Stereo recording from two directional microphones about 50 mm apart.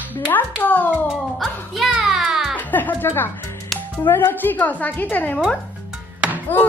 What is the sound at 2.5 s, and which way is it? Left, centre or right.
Music, left.